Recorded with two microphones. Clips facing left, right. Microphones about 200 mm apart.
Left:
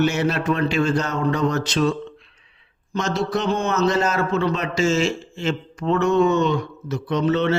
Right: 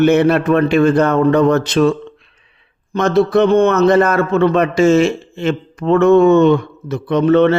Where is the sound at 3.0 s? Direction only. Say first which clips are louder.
Right 11 dB; 55° right (ahead or behind).